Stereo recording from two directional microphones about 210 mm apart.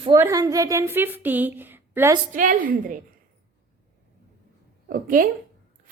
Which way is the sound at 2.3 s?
40° right (ahead or behind).